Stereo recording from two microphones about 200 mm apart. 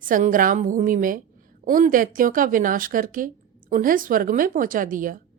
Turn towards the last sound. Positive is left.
turn(degrees=-40)  # may be behind; listen again after turning